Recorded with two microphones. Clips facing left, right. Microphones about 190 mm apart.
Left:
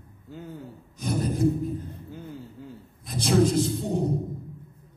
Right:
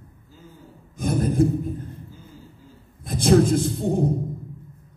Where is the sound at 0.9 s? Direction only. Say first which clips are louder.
Right 4 dB; 50° right (ahead or behind).